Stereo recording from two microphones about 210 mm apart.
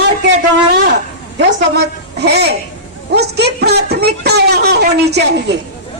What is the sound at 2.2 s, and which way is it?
A man's voice, 50° right (ahead or behind).